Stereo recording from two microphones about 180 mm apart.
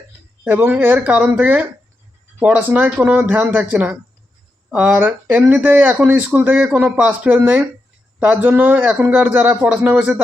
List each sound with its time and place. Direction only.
0.4 s speech: 10° right (ahead or behind)